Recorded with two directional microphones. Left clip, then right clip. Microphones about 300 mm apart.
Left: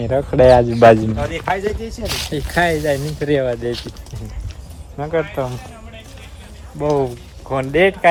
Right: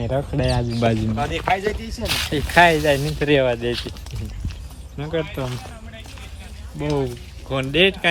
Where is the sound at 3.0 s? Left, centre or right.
Centre.